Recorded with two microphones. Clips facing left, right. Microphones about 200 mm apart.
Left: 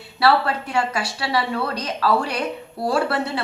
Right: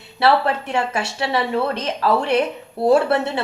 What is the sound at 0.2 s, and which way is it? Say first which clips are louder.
A woman's voice: right 2 dB; 25° right (ahead or behind).